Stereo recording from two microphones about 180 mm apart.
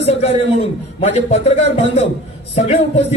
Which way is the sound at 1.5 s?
35° left (ahead or behind).